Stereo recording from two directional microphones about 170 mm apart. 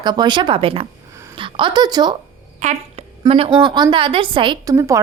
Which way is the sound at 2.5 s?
40° right (ahead or behind).